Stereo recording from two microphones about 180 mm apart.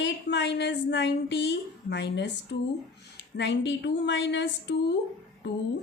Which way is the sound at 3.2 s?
90° left.